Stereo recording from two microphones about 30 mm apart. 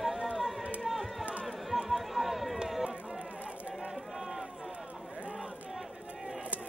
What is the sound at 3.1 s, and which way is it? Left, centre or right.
Run, right.